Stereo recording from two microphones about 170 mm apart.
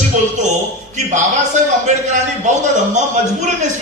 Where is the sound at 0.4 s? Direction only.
45° right (ahead or behind).